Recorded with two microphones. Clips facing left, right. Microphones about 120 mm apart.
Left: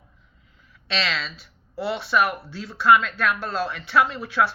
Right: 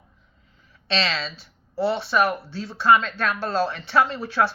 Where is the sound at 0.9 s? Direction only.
30° right (ahead or behind).